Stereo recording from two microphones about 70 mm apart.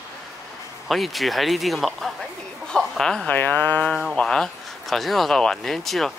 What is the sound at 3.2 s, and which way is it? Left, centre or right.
Speech, left.